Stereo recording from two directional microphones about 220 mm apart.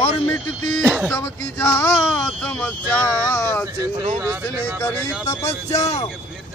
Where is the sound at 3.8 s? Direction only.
15° right (ahead or behind).